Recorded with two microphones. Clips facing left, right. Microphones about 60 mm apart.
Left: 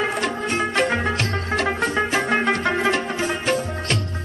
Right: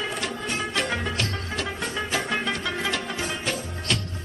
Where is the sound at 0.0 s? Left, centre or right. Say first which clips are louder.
Left 7 dB; left.